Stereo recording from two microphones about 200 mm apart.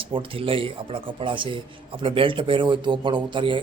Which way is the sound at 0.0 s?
25° right (ahead or behind).